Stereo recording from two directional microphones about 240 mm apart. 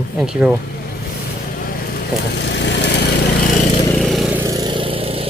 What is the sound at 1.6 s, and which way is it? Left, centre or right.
Vehicle, left.